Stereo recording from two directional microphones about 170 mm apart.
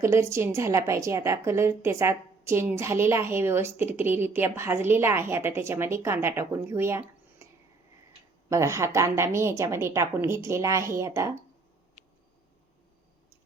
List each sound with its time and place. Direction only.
0.0 s a woman's voice: 15° right (ahead or behind)
8.4 s a woman's voice: 15° right (ahead or behind)